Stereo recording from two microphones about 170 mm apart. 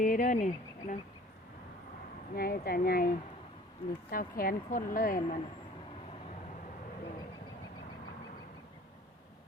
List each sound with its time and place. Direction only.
0.0 s speech: 50° left (ahead or behind)
2.3 s a woman's voice: 60° left (ahead or behind)